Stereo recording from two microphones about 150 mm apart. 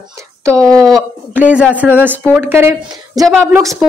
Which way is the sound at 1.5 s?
10° right (ahead or behind).